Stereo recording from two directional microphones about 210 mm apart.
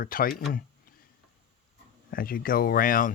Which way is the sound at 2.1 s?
45° left (ahead or behind).